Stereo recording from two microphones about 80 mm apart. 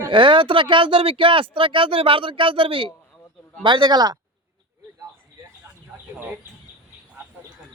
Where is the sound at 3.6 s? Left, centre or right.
Right.